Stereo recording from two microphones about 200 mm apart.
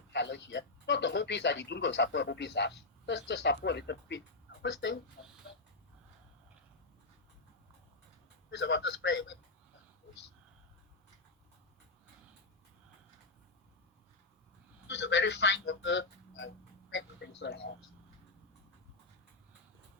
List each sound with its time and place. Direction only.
0.1 s speech: 60° left (ahead or behind)
8.4 s speech: 60° left (ahead or behind)
14.8 s speech: 60° left (ahead or behind)